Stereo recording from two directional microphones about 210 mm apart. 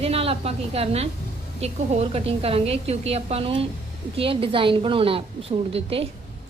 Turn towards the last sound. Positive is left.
turn(degrees=-25)  # may be behind; listen again after turning